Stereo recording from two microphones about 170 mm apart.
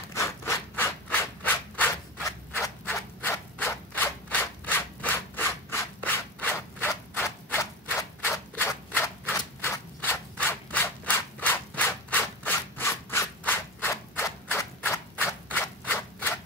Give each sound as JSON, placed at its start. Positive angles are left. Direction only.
{"t": 0.1, "sound": "rub", "side_deg": 15}
{"t": 1.4, "sound": "a sound", "side_deg": 10}
{"t": 9.6, "sound": "rub", "side_deg": 10}